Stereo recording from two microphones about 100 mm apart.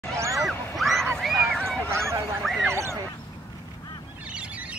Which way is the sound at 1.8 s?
30° right (ahead or behind).